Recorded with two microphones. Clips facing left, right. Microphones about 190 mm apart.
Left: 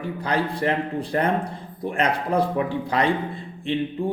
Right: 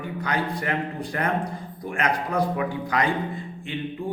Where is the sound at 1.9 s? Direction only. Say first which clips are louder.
Left 3 dB; 30° left (ahead or behind).